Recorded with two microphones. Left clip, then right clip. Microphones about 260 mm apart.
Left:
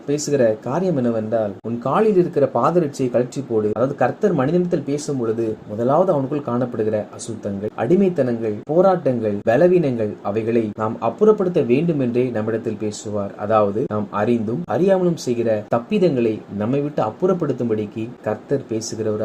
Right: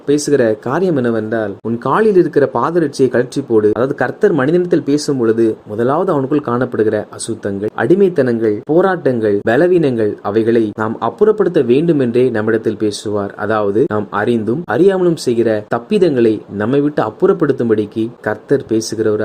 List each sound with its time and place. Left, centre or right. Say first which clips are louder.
0.1 s speech: right 5 dB; right
5.8 s speech: right 2 dB; right